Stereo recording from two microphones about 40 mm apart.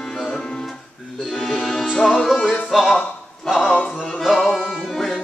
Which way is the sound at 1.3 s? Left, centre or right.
Centre.